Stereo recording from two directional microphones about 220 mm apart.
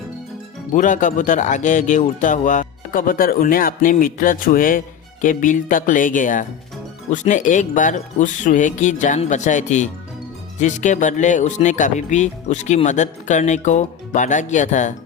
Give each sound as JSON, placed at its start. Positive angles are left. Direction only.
{"t": 0.7, "sound": "speech", "side_deg": 35}